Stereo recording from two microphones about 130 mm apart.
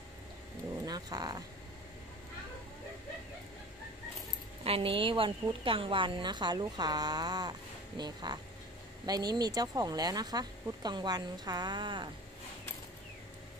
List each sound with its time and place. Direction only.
0.8 s cat: 30° right (ahead or behind)
4.6 s speech: 45° right (ahead or behind)